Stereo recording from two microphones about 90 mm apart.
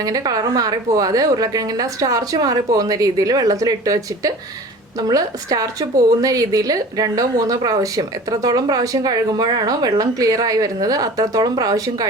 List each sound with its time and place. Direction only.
0.0 s a woman's voice: 45° right (ahead or behind)